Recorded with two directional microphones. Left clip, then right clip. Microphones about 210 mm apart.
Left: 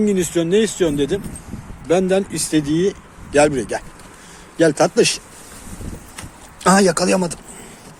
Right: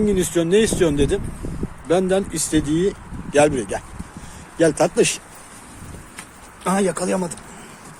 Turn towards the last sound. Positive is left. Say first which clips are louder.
# left 5 dB
turn(degrees=20)  # may be behind; listen again after turning